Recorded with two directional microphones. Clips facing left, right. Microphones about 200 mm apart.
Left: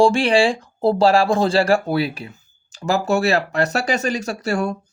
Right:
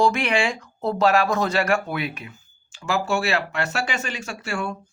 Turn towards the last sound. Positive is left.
turn(degrees=40)  # may be behind; listen again after turning